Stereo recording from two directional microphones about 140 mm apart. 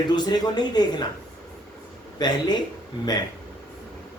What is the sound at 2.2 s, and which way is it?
Speech, 30° left (ahead or behind).